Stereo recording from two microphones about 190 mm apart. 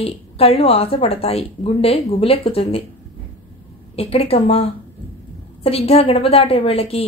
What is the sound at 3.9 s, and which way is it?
A woman's voice, 30° left (ahead or behind).